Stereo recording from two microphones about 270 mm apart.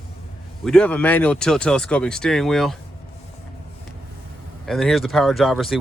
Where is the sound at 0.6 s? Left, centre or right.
Centre.